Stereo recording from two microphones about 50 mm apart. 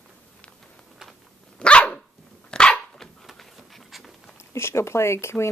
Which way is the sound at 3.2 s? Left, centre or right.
Centre.